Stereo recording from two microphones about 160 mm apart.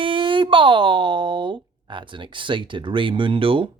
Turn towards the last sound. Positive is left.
turn(degrees=-35)  # may be behind; listen again after turning